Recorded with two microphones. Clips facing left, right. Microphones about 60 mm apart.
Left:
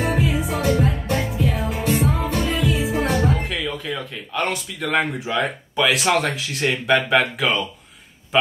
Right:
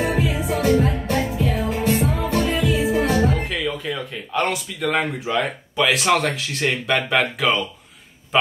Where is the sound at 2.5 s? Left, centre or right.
Right.